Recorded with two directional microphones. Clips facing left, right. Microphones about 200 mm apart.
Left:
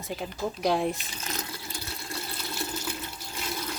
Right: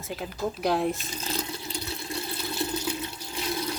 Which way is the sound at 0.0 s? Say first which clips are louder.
Right 1 dB; centre (ahead or behind).